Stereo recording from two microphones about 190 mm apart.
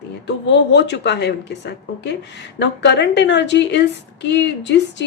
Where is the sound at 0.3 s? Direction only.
65° left (ahead or behind).